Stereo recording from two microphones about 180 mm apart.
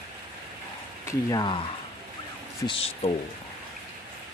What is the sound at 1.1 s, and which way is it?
Speech, 20° left (ahead or behind).